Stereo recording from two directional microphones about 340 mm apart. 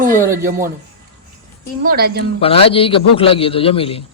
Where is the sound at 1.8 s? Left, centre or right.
Right.